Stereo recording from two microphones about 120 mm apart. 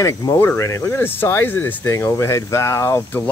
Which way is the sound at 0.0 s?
30° left (ahead or behind).